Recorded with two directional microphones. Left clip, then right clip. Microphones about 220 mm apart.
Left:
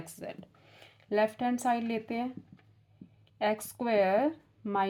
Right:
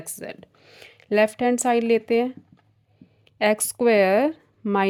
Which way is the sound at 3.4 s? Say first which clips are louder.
Right 11 dB; 50° right (ahead or behind).